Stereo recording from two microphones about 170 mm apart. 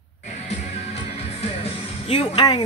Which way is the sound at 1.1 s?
35° left (ahead or behind).